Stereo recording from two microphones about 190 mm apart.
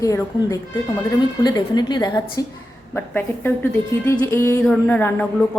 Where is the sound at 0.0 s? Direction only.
15° left (ahead or behind).